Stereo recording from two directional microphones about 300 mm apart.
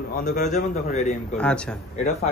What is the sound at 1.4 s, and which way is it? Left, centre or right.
Speech, centre.